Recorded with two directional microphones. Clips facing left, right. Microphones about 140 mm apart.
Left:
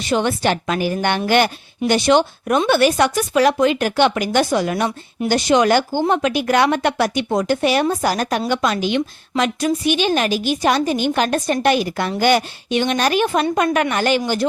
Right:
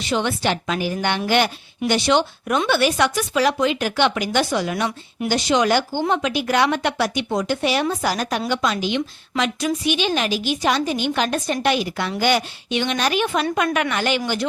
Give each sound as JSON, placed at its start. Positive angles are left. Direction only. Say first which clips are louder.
{"t": 0.0, "sound": "a woman's voice", "louder": "left 3 dB", "side_deg": 45}